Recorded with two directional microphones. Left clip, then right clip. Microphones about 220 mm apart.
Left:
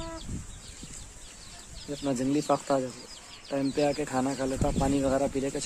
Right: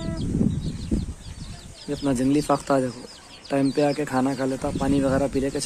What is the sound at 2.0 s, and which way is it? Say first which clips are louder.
Speech: right 6 dB; centre (ahead or behind).